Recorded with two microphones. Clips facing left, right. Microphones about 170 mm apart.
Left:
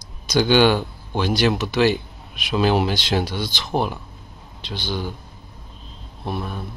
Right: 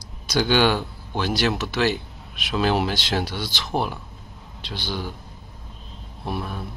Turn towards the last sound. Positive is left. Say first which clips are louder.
# left 1 dB
turn(degrees=-5)  # may be behind; listen again after turning